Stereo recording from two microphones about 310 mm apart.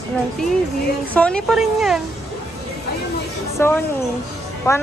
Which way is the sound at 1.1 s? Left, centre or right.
Centre.